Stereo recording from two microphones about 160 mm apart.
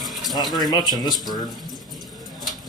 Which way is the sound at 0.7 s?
25° left (ahead or behind).